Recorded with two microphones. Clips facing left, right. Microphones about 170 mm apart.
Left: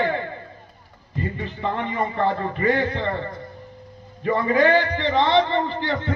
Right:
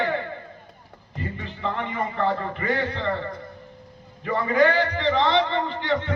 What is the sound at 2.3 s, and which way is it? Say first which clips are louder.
Music: left 4 dB; 35° left (ahead or behind).